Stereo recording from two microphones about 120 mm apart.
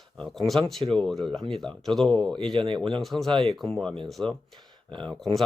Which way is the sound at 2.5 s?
45° right (ahead or behind).